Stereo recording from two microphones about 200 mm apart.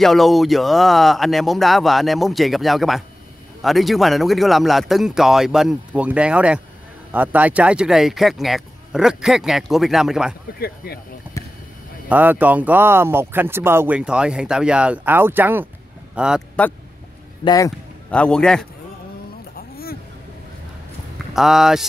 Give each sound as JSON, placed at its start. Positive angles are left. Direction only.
{"t": 0.0, "sound": "speech", "side_deg": 0}
{"t": 11.3, "sound": "a sound", "side_deg": -10}
{"t": 12.1, "sound": "speech", "side_deg": -10}
{"t": 17.5, "sound": "speech", "side_deg": 15}
{"t": 18.1, "sound": "speech", "side_deg": 5}
{"t": 19.5, "sound": "a sound", "side_deg": 50}
{"t": 21.3, "sound": "speech", "side_deg": 0}